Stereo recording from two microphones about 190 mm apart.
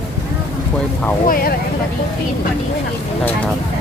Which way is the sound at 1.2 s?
50° left (ahead or behind).